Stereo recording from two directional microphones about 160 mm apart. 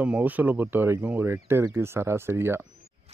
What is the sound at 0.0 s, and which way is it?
Speech, 10° right (ahead or behind).